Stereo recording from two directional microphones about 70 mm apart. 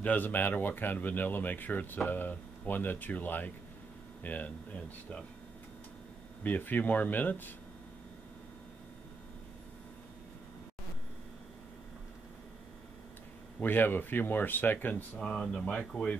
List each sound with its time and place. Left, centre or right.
0.0 s speech: left
6.4 s speech: left
13.6 s speech: left
15.1 s speech: centre